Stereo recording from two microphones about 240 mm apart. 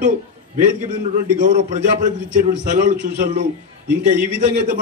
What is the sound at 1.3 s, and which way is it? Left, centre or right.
A man's voice, right.